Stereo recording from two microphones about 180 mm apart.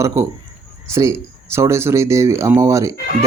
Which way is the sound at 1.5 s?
15° right (ahead or behind).